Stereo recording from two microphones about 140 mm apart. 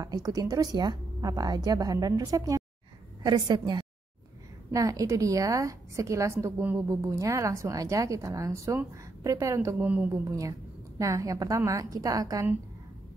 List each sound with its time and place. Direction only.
0.0 s a woman's voice: 25° right (ahead or behind)
11.0 s a woman's voice: 25° right (ahead or behind)